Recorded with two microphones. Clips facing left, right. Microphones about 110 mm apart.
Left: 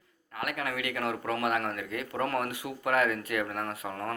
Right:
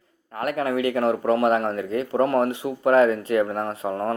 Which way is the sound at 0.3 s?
35° right (ahead or behind).